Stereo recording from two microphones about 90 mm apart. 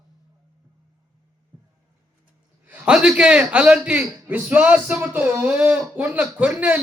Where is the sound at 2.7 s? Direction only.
10° right (ahead or behind).